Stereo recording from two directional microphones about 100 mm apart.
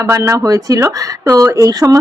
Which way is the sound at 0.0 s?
30° right (ahead or behind).